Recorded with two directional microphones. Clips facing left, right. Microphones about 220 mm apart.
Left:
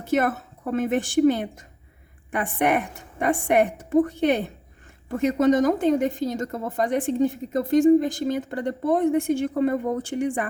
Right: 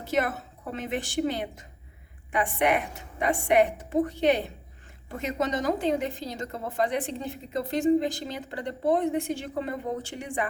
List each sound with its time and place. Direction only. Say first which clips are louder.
0.0 s a woman's voice: left 5 dB; 50° left (ahead or behind)